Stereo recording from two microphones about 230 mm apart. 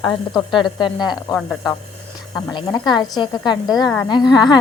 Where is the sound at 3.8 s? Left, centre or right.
Centre.